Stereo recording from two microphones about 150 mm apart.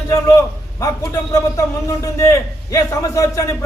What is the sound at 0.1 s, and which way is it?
A man's voice, 20° left (ahead or behind).